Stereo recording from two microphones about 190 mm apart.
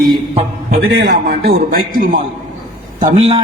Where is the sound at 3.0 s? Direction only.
35° right (ahead or behind).